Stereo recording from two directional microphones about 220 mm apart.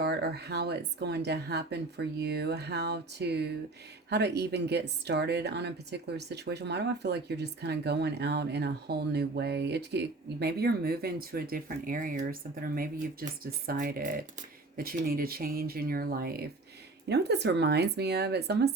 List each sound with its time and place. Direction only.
0.0 s a woman's voice: 50° right (ahead or behind)